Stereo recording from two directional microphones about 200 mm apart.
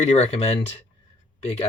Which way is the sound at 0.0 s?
35° left (ahead or behind).